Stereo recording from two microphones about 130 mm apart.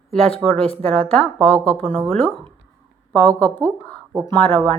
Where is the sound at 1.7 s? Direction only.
45° right (ahead or behind).